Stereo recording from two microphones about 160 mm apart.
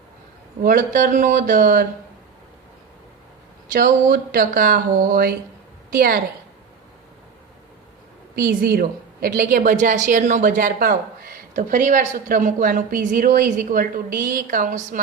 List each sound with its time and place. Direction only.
0.6 s a woman's voice: 60° right (ahead or behind)
3.7 s a woman's voice: 60° right (ahead or behind)
8.4 s a woman's voice: 70° right (ahead or behind)